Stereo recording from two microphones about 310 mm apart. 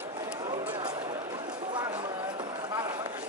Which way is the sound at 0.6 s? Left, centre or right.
Centre.